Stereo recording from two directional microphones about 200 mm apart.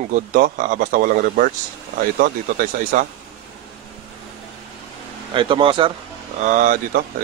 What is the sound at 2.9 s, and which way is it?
Speech, 45° right (ahead or behind).